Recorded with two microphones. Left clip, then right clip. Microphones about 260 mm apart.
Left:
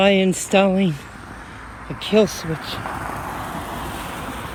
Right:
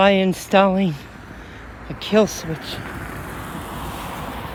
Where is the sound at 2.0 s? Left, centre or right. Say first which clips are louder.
Even; right.